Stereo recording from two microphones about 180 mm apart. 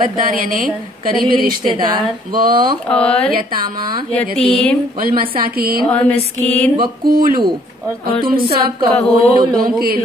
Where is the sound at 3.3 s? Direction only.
55° right (ahead or behind).